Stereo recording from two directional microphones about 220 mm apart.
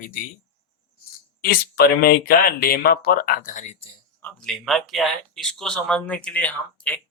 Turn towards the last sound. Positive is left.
turn(degrees=5)  # may be behind; listen again after turning